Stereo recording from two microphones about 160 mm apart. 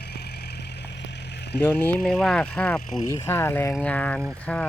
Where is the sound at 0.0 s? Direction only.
90° left.